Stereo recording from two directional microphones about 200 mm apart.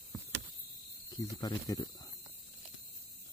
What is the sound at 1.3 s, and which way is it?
Speech, 20° left (ahead or behind).